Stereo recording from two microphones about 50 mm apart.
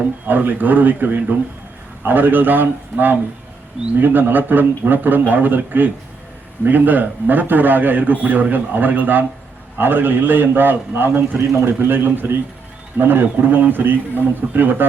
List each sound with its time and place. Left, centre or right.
0.3 s a man's voice: right
11.3 s a man's voice: right
11.8 s a man's voice: right